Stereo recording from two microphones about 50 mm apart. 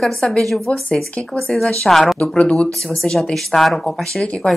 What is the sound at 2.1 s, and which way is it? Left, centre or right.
Speech, left.